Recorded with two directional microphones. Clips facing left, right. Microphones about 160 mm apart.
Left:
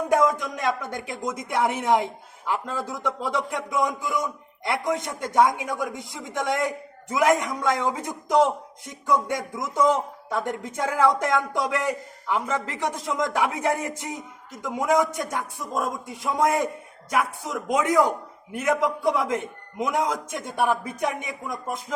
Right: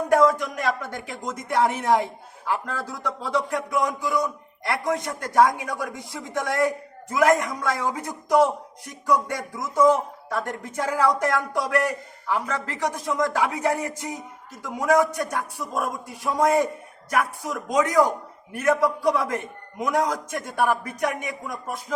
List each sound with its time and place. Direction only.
0.1 s a man's voice: 20° left (ahead or behind)